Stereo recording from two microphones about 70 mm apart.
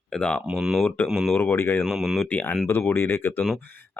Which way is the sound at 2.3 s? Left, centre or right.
Left.